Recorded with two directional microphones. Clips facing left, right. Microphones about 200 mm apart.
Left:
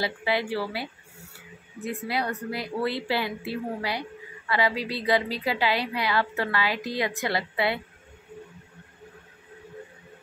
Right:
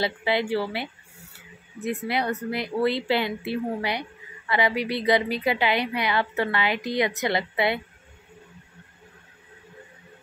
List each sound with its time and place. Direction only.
0.0 s a woman's voice: 20° right (ahead or behind)
1.9 s a woman's voice: 20° right (ahead or behind)